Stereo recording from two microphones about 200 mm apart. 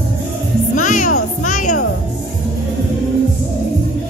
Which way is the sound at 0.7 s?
40° left (ahead or behind).